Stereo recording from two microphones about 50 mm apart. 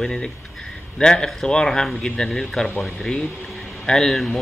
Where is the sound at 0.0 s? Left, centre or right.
Centre.